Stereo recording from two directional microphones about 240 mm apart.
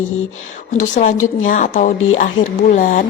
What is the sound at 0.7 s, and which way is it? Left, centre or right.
A woman's voice, left.